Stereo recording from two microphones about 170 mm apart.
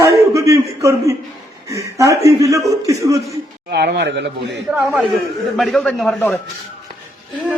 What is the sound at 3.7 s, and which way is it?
Speech, 75° right (ahead or behind).